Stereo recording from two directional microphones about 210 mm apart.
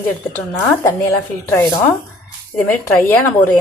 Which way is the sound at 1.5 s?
10° left (ahead or behind).